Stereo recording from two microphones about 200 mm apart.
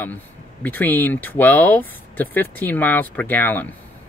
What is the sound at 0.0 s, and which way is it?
Speech, 10° left (ahead or behind).